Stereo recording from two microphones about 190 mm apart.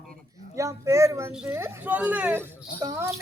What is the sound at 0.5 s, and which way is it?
Speech, 15° right (ahead or behind).